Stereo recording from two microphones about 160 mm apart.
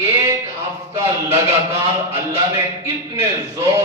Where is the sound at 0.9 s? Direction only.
15° right (ahead or behind).